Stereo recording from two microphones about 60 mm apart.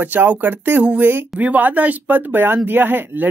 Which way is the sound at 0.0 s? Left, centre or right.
Right.